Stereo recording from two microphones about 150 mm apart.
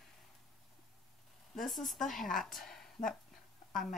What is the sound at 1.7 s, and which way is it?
A woman's voice, centre (ahead or behind).